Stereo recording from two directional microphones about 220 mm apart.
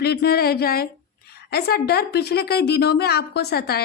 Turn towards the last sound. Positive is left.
turn(degrees=45)  # may be behind; listen again after turning